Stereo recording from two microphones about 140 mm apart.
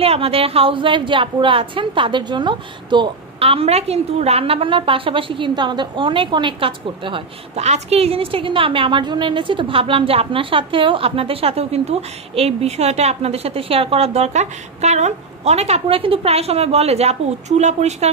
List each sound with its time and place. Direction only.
0.0 s a woman's voice: 45° right (ahead or behind)